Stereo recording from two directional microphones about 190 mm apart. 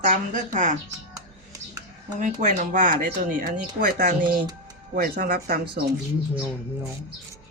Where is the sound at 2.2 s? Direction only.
40° right (ahead or behind).